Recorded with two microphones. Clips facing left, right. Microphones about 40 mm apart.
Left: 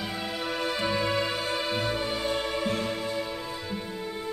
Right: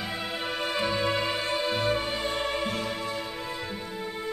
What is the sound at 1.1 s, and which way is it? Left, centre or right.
Music, centre.